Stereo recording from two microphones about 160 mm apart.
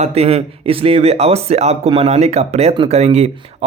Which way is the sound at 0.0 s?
40° right (ahead or behind).